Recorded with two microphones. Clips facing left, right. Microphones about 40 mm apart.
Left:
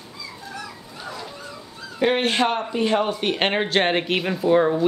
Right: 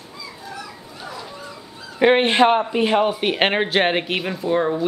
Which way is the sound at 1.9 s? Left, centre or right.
Right.